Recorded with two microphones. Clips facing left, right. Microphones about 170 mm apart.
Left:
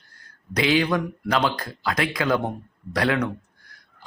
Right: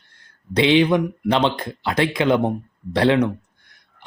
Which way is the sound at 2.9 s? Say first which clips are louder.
Right 6 dB; 25° right (ahead or behind).